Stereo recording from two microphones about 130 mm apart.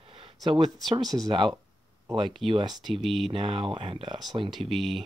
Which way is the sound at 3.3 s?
45° right (ahead or behind).